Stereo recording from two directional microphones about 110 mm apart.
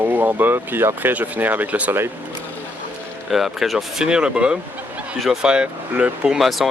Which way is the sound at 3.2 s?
Centre (ahead or behind).